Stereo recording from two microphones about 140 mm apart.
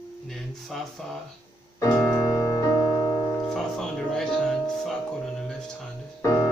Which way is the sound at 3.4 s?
5° left (ahead or behind).